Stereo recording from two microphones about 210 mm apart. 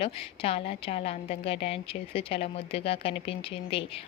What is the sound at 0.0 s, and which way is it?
A woman's voice, 25° left (ahead or behind).